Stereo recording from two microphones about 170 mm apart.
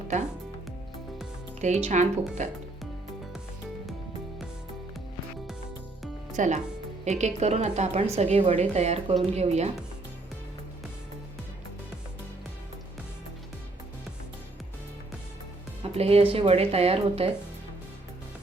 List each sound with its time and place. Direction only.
1.6 s speech: 45° right (ahead or behind)
6.3 s speech: 45° right (ahead or behind)
15.8 s speech: 35° right (ahead or behind)